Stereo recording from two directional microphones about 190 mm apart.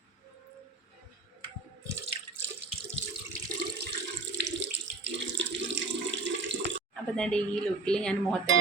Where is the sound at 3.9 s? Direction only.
65° right (ahead or behind).